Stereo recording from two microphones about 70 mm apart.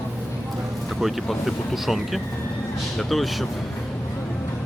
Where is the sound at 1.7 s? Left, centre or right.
Centre.